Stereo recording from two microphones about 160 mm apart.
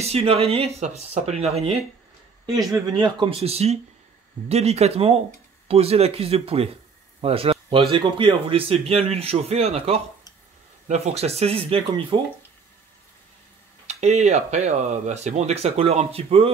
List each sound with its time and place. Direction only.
0.0 s speech: 40° right (ahead or behind)
14.0 s speech: 45° right (ahead or behind)